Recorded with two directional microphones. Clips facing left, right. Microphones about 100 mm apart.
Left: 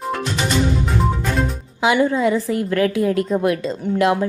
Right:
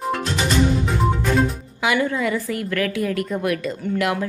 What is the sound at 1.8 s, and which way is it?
A woman's voice, 25° left (ahead or behind).